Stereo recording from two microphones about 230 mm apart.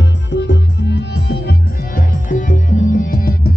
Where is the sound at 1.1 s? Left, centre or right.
Left.